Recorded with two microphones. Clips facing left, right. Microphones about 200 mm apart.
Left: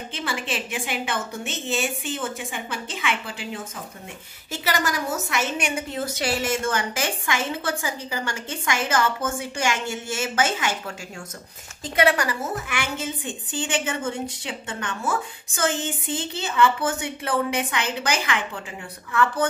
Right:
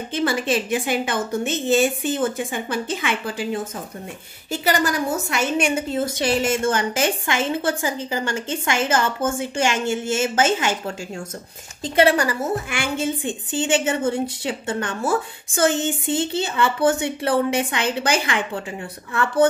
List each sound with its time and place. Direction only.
0.1 s a woman's voice: 40° right (ahead or behind)
4.5 s a woman's voice: 30° right (ahead or behind)
11.9 s a woman's voice: 30° right (ahead or behind)